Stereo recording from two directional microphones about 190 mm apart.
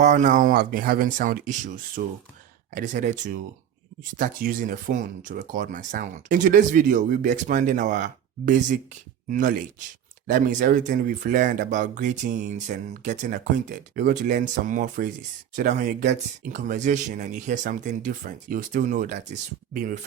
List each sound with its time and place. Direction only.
0.0 s speech: 40° right (ahead or behind)